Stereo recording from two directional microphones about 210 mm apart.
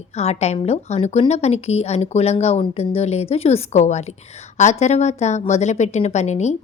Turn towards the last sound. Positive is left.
turn(degrees=35)  # may be behind; listen again after turning